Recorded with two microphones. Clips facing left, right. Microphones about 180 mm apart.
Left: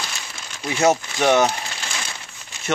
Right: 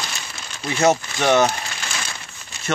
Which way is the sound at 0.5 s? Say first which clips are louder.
Even; 10° left (ahead or behind).